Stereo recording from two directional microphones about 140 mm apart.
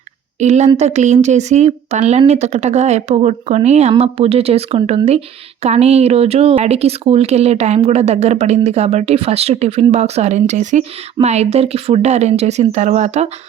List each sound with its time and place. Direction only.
0.3 s a woman's voice: 55° right (ahead or behind)